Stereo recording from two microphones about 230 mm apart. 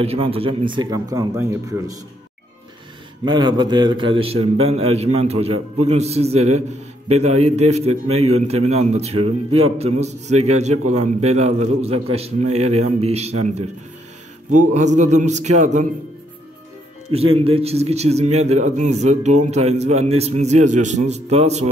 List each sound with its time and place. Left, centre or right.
0.0 s a man's voice: right
3.3 s a man's voice: centre
14.7 s music: right
17.1 s a man's voice: right